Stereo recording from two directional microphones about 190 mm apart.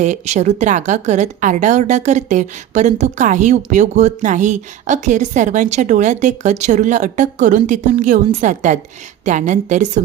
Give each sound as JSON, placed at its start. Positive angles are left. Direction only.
{"t": 0.0, "sound": "a woman's voice", "side_deg": -35}